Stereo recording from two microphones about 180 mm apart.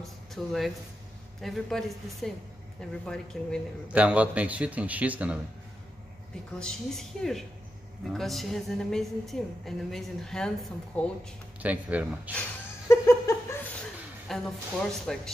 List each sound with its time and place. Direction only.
0.0 s a woman's voice: centre (ahead or behind)
3.9 s a man's voice: 10° right (ahead or behind)
6.6 s a woman's voice: centre (ahead or behind)
11.6 s a man's voice: 10° right (ahead or behind)
12.8 s a sound: 20° left (ahead or behind)
14.2 s a woman's voice: centre (ahead or behind)